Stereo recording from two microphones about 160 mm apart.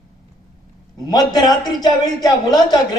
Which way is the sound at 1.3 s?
25° left (ahead or behind).